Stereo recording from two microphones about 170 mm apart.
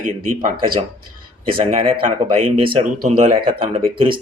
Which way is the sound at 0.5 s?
30° right (ahead or behind).